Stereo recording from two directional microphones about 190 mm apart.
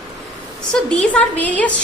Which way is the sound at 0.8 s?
5° left (ahead or behind).